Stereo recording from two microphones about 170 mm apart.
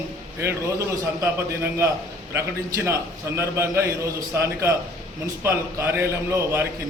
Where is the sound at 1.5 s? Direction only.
15° right (ahead or behind).